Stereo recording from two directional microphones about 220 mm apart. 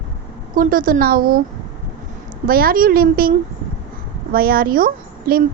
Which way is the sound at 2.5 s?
40° right (ahead or behind).